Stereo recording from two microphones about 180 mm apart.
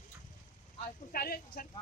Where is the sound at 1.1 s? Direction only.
55° left (ahead or behind).